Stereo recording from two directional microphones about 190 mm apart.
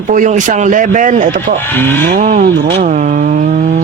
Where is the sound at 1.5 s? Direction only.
10° left (ahead or behind).